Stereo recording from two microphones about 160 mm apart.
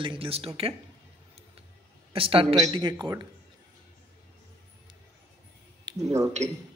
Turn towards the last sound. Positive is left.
turn(degrees=-20)  # may be behind; listen again after turning